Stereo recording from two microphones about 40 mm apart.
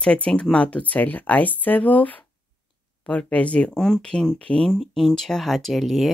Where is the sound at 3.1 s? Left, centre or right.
Left.